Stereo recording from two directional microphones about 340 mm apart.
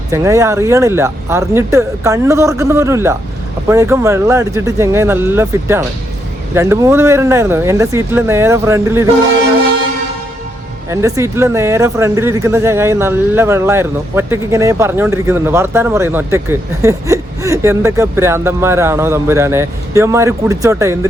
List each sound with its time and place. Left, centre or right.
0.1 s speech: centre
10.8 s speech: centre